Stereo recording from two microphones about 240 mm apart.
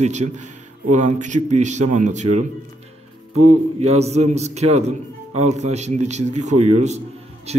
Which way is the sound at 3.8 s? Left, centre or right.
Right.